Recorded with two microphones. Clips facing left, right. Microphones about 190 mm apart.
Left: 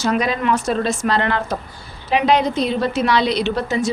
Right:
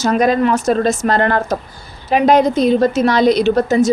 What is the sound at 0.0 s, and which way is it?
A woman's voice, 45° right (ahead or behind).